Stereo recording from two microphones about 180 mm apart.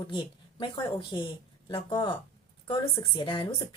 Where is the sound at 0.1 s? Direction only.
25° left (ahead or behind).